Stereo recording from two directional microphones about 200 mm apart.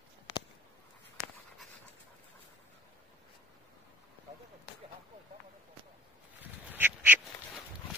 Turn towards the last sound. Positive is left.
turn(degrees=-10)  # may be behind; listen again after turning